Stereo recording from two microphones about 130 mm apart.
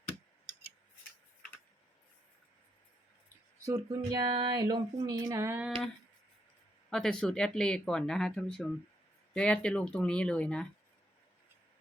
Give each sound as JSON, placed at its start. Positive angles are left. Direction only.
{"t": 3.6, "sound": "speech", "side_deg": -25}
{"t": 6.9, "sound": "speech", "side_deg": 5}